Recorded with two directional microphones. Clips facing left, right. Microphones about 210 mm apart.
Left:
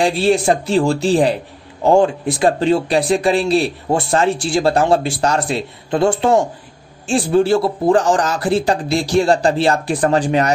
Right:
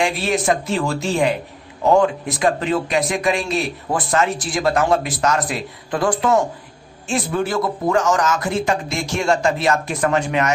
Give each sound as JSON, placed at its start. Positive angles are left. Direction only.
{"t": 0.0, "sound": "a man's voice", "side_deg": 30}